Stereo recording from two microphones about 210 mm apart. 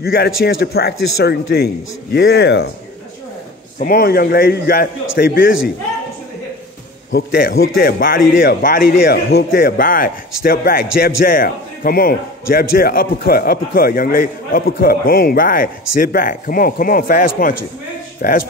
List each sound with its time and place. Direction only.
0.0 s a man's voice: 45° left (ahead or behind)
3.8 s a man's voice: 45° left (ahead or behind)
7.1 s a man's voice: 50° left (ahead or behind)